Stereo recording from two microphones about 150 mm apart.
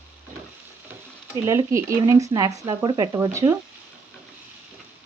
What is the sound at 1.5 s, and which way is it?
Speech, 20° right (ahead or behind).